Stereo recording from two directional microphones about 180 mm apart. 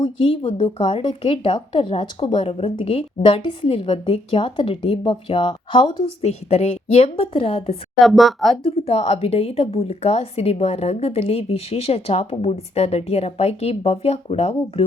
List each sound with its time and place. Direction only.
0.0 s a woman's voice: 30° left (ahead or behind)
8.0 s speech: centre (ahead or behind)
8.6 s a woman's voice: 35° left (ahead or behind)